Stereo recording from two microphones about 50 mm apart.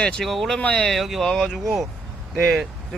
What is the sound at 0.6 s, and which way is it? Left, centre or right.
Speech, left.